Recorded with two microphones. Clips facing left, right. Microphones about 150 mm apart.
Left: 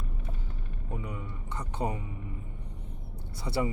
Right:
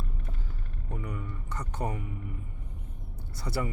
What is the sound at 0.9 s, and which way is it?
Speech, 15° left (ahead or behind).